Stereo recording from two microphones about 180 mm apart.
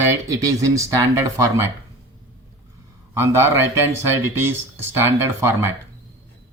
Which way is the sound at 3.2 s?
15° right (ahead or behind).